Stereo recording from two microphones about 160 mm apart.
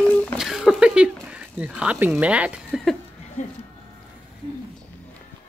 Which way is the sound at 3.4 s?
50° left (ahead or behind).